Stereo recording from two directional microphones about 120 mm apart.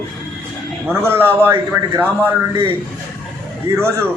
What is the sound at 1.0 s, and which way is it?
A man's voice, 20° right (ahead or behind).